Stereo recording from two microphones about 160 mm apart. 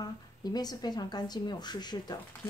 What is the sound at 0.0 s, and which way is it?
A woman's voice, 25° left (ahead or behind).